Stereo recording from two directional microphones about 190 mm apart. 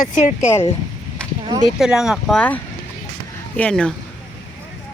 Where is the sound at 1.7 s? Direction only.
Centre (ahead or behind).